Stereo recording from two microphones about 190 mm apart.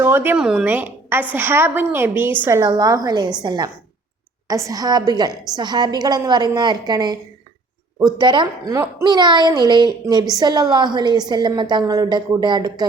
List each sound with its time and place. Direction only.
0.0 s a woman's voice: 10° right (ahead or behind)
8.2 s a woman's voice: 25° right (ahead or behind)